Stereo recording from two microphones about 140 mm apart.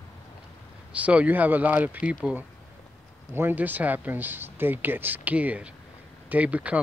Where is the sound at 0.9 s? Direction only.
10° right (ahead or behind).